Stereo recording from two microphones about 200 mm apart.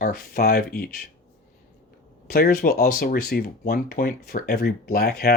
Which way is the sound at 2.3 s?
50° left (ahead or behind).